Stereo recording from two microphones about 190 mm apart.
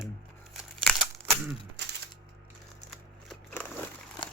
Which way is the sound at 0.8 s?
5° left (ahead or behind).